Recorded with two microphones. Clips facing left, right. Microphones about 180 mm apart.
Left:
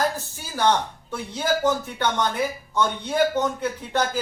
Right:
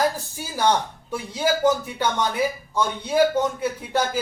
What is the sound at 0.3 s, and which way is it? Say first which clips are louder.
A man's voice: left 1 dB; 10° right (ahead or behind).